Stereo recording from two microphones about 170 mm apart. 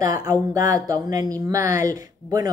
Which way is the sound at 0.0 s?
20° right (ahead or behind).